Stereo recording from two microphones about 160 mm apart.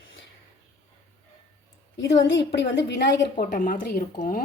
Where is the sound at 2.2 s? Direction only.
90° left.